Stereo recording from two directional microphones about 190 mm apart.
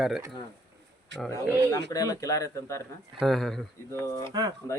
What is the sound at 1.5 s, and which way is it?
Speech, 15° right (ahead or behind).